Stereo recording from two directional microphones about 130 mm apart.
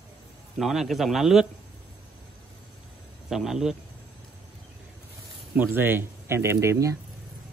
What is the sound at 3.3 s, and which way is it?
Speech, centre (ahead or behind).